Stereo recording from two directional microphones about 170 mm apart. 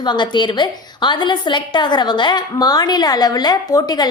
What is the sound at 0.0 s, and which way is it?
A woman's voice, 25° left (ahead or behind).